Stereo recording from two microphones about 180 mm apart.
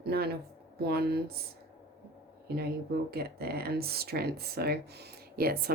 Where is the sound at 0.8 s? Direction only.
60° right (ahead or behind).